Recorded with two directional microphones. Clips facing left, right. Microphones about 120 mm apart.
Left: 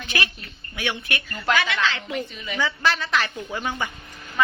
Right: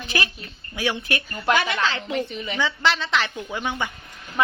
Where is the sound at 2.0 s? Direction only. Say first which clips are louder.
Right 3 dB; 30° right (ahead or behind).